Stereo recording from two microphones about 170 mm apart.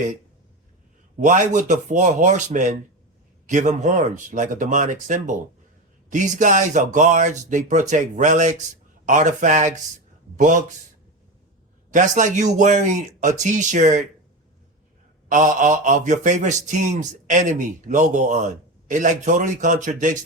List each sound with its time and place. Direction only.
1.2 s speech: 50° right (ahead or behind)
11.9 s speech: 45° right (ahead or behind)
15.3 s speech: 45° right (ahead or behind)